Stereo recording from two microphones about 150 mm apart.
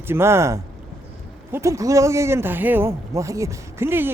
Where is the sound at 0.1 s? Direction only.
15° right (ahead or behind).